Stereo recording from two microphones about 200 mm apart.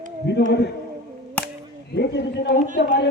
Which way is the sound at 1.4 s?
55° left (ahead or behind).